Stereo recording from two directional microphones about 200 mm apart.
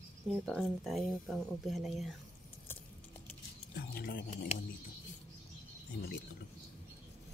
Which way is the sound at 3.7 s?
50° left (ahead or behind).